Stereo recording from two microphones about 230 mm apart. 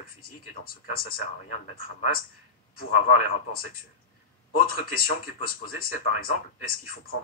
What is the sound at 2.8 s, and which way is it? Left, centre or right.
Speech, left.